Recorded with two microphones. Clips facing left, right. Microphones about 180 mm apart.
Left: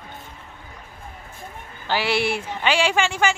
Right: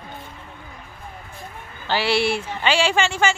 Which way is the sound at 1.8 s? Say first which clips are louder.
Right 2 dB; 15° left (ahead or behind).